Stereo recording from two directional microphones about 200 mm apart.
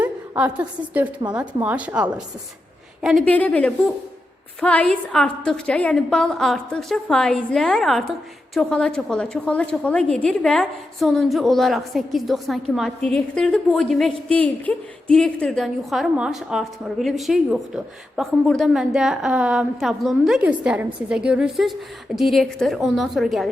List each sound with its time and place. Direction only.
0.0 s a woman's voice: 5° right (ahead or behind)